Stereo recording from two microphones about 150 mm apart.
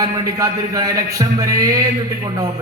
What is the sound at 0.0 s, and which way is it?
A man's voice, 20° right (ahead or behind).